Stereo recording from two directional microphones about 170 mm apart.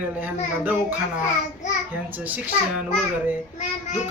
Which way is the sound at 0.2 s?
10° right (ahead or behind).